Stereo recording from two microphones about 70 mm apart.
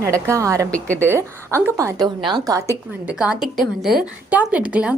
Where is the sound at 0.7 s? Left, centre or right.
Left.